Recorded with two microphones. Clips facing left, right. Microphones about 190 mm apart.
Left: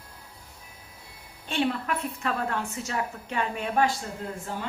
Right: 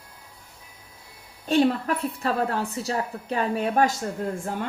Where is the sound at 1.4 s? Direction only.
40° right (ahead or behind).